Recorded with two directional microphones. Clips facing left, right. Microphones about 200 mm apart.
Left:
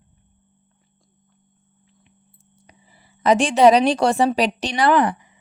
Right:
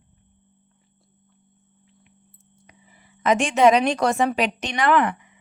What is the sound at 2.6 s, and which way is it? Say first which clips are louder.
A woman's voice: left 1 dB; 35° left (ahead or behind).